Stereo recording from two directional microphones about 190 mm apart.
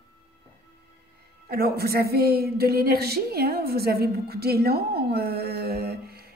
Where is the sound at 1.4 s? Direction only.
55° right (ahead or behind).